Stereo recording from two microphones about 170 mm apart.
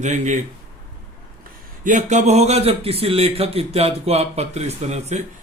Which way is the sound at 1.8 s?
50° right (ahead or behind).